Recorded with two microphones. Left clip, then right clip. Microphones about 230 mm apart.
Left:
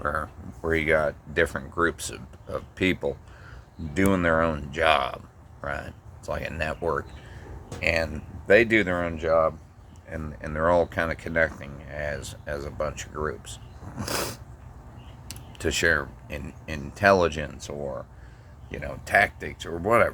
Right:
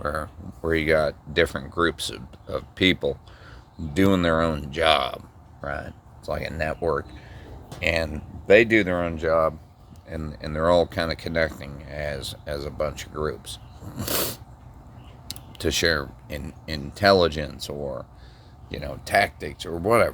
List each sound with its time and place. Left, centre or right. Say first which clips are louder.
0.0 s speech: even; right
15.5 s speech: even; right